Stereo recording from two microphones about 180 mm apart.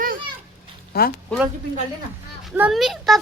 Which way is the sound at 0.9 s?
60° left (ahead or behind).